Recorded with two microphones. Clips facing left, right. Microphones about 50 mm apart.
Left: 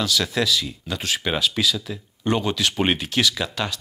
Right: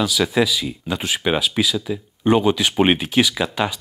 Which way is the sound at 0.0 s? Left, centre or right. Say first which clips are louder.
Right 4 dB; centre.